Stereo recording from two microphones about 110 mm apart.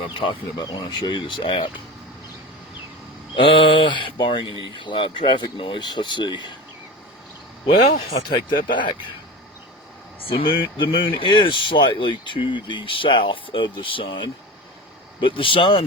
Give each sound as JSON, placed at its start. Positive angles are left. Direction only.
{"t": 0.1, "sound": "speech", "side_deg": 50}
{"t": 0.5, "sound": "speech", "side_deg": 35}
{"t": 3.3, "sound": "speech", "side_deg": 50}
{"t": 8.3, "sound": "speech", "side_deg": 45}
{"t": 10.2, "sound": "speech", "side_deg": 55}